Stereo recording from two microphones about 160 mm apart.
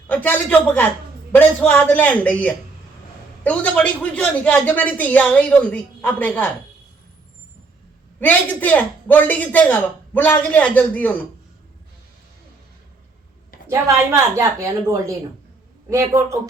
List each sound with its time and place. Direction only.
0.1 s a man's voice: 10° left (ahead or behind)
8.2 s a man's voice: 10° left (ahead or behind)
13.7 s a woman's voice: 20° right (ahead or behind)